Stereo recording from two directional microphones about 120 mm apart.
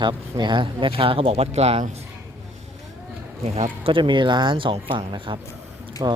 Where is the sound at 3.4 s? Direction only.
55° right (ahead or behind).